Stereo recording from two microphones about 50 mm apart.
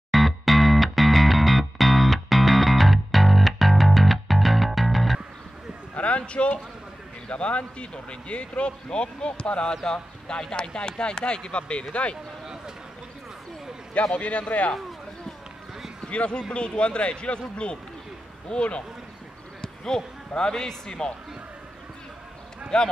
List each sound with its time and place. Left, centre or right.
0.1 s music: centre
5.9 s a sound: left
7.2 s a man's voice: left
14.1 s a man's voice: left
16.0 s a man's voice: left
22.7 s speech: centre